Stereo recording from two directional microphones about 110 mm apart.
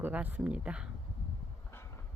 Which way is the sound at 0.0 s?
15° right (ahead or behind).